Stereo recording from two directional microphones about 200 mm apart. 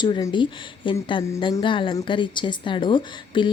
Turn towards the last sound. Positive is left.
turn(degrees=25)  # may be behind; listen again after turning